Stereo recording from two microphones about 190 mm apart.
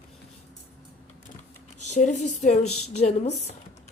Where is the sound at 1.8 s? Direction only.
40° left (ahead or behind).